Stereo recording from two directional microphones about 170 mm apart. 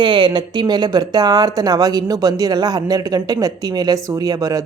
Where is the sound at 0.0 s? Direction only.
25° right (ahead or behind).